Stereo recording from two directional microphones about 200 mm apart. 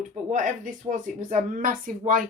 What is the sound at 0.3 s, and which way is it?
Speech, 40° right (ahead or behind).